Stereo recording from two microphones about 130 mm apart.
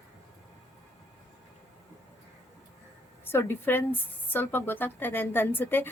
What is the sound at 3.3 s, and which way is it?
Speech, 15° left (ahead or behind).